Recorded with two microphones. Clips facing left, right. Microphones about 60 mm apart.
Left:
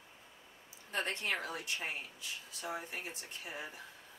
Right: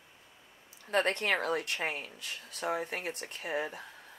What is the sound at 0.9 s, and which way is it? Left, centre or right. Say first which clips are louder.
Speech: right 8 dB; right.